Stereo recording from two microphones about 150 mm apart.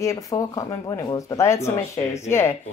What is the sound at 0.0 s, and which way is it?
Speech, 20° left (ahead or behind).